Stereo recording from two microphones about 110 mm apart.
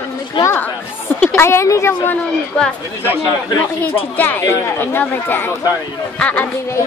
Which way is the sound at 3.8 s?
15° left (ahead or behind).